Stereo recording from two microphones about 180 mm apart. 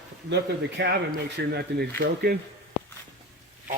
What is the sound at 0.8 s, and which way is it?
Speech, 85° right.